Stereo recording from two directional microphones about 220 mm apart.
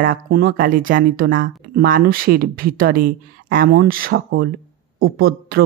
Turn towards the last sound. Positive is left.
turn(degrees=-45)  # may be behind; listen again after turning